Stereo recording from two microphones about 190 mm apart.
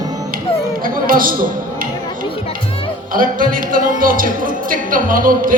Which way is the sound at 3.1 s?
45° right (ahead or behind).